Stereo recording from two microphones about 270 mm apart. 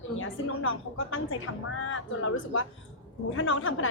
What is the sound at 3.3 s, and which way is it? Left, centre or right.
Speech, left.